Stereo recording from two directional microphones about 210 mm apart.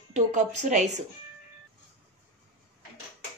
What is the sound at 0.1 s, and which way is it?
Speech, 35° right (ahead or behind).